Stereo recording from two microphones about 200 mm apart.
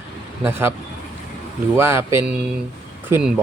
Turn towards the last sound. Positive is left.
turn(degrees=-5)  # may be behind; listen again after turning